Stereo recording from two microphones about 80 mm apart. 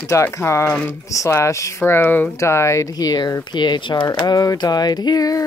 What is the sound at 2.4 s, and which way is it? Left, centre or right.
Speech, left.